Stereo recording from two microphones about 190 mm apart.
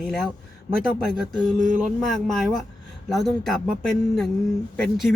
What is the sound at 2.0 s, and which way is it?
Speech, centre (ahead or behind).